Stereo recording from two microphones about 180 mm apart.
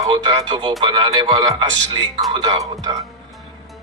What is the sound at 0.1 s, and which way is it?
Speech, 25° right (ahead or behind).